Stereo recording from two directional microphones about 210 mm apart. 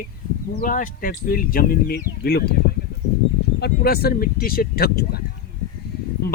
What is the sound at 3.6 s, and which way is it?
Speech, 45° left (ahead or behind).